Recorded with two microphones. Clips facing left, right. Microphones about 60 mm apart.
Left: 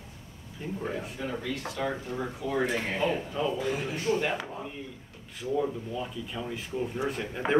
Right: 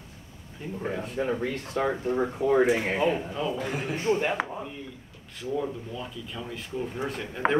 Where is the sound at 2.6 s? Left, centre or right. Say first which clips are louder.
Right 3 dB; centre.